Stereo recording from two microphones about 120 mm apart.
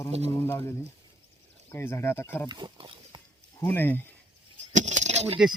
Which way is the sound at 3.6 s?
15° left (ahead or behind).